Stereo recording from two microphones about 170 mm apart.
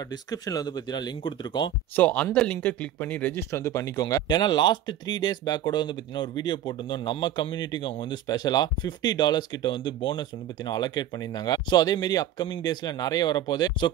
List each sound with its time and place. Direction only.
0.1 s speech: 20° left (ahead or behind)
2.0 s speech: 10° left (ahead or behind)